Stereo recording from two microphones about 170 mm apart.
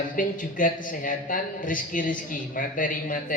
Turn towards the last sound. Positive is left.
turn(degrees=50)  # may be behind; listen again after turning